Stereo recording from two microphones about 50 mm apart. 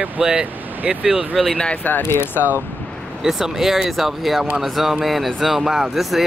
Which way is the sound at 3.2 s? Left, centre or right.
Centre.